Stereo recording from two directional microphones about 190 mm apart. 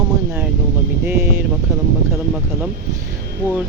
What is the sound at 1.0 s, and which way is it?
Speech, 10° right (ahead or behind).